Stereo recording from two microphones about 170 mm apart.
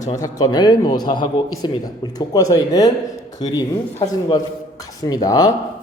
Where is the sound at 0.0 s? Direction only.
20° left (ahead or behind).